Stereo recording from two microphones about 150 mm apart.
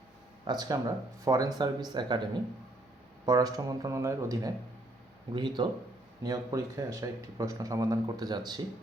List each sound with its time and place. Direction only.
0.4 s a man's voice: 25° right (ahead or behind)
3.2 s a man's voice: 25° right (ahead or behind)